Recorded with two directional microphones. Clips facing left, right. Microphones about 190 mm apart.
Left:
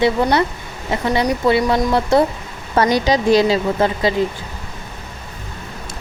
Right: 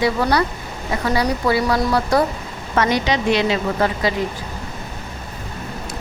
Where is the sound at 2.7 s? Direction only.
35° left (ahead or behind).